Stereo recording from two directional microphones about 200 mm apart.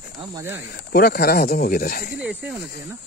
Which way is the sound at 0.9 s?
50° left (ahead or behind).